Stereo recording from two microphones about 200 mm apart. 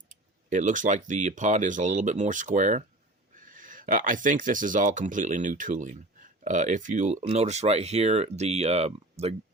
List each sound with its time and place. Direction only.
0.1 s speech: 40° right (ahead or behind)